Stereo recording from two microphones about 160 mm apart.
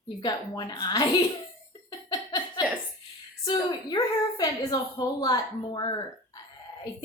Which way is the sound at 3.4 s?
25° left (ahead or behind).